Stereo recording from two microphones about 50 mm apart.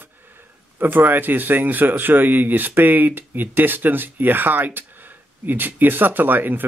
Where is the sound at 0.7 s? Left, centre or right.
Right.